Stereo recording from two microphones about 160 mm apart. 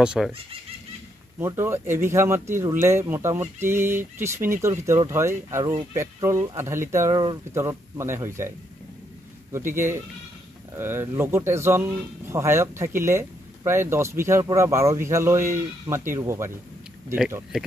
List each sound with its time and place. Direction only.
0.0 s speech: 5° right (ahead or behind)
1.4 s speech: 15° right (ahead or behind)